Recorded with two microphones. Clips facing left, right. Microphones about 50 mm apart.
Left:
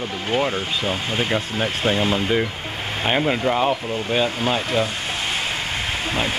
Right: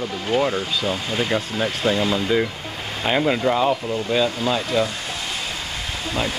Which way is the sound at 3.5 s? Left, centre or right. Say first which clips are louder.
Right 1 dB; left.